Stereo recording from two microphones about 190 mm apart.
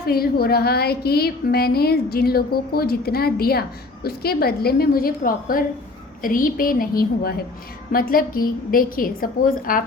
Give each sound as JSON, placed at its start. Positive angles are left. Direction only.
{"t": 0.0, "sound": "a woman's voice", "side_deg": 55}